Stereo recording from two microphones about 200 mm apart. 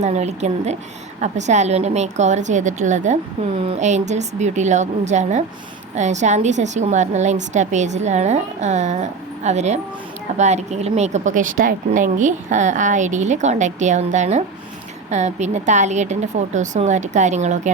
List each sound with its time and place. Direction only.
0.0 s speech: 35° right (ahead or behind)